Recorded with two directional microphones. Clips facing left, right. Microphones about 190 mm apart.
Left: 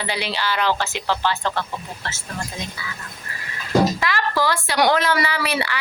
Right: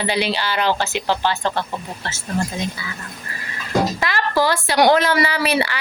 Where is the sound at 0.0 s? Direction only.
20° right (ahead or behind).